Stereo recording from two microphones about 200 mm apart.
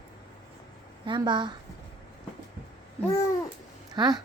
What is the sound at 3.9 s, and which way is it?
Speech, 20° right (ahead or behind).